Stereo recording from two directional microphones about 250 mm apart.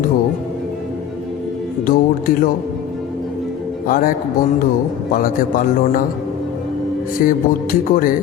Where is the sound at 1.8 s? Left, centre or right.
Left.